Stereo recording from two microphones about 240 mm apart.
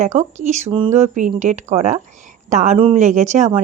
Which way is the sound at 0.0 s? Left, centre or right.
Right.